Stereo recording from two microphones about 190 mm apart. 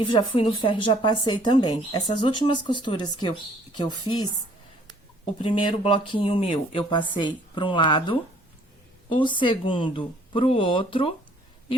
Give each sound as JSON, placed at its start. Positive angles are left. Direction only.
{"t": 0.0, "sound": "speech", "side_deg": 25}